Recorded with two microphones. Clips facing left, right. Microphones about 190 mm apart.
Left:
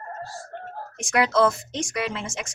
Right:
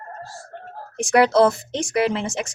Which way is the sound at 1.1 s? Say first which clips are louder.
Right 5 dB; 35° right (ahead or behind).